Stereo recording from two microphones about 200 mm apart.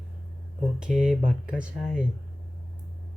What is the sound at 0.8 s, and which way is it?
Speech, 5° right (ahead or behind).